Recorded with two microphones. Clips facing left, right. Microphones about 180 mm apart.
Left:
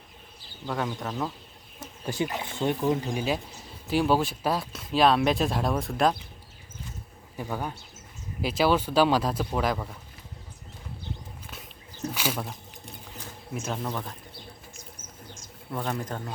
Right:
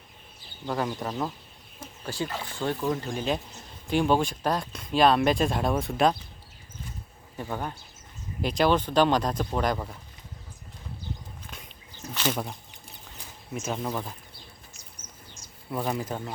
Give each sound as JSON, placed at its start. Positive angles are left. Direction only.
{"t": 0.7, "sound": "speech", "side_deg": -5}
{"t": 2.0, "sound": "speech", "side_deg": 20}
{"t": 7.3, "sound": "speech", "side_deg": 5}
{"t": 12.1, "sound": "speech", "side_deg": 10}
{"t": 12.4, "sound": "a sound", "side_deg": 0}
{"t": 13.7, "sound": "speech", "side_deg": -5}
{"t": 15.7, "sound": "speech", "side_deg": -10}